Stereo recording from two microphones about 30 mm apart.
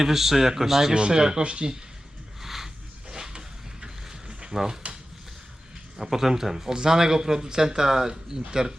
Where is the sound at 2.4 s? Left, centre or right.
Centre.